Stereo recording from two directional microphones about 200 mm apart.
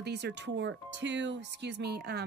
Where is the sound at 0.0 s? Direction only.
55° right (ahead or behind).